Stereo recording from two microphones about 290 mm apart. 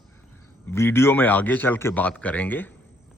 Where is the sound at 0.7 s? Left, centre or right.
Centre.